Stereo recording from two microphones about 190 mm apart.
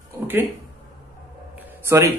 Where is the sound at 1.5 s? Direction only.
10° right (ahead or behind).